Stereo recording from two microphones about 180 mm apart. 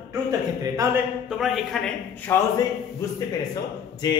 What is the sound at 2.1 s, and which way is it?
Speech, 10° left (ahead or behind).